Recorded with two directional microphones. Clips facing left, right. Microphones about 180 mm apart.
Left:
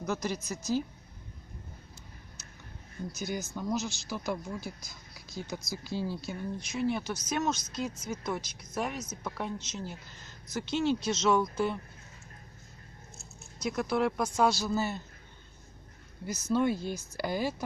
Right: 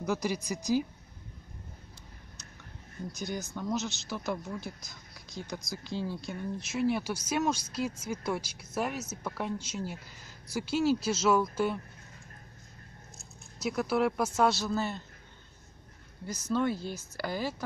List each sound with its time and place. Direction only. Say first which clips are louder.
0.0 s speech: right 2 dB; 10° right (ahead or behind)
3.1 s speech: left 1 dB; 5° left (ahead or behind)
6.7 s speech: right 2 dB; 5° right (ahead or behind)
13.2 s speech: even; centre (ahead or behind)
16.3 s speech: left 2 dB; 10° left (ahead or behind)